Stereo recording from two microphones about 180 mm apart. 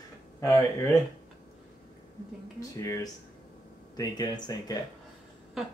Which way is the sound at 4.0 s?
20° left (ahead or behind).